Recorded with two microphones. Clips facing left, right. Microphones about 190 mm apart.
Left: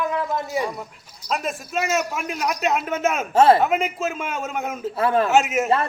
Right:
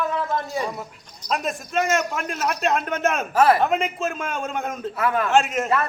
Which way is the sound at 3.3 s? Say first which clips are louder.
Left 3 dB; 25° left (ahead or behind).